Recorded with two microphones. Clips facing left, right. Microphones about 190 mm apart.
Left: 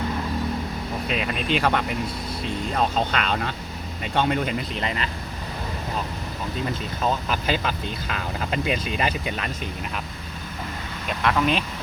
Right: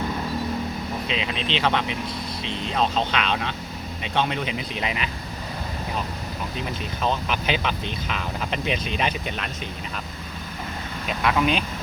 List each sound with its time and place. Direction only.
1.0 s speech: 50° left (ahead or behind)
1.3 s speech: 5° left (ahead or behind)
4.8 s speech: 10° right (ahead or behind)
7.0 s speech: 5° left (ahead or behind)
11.2 s speech: 5° right (ahead or behind)